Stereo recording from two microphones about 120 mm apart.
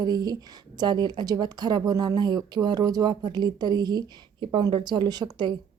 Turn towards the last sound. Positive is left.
turn(degrees=-35)  # may be behind; listen again after turning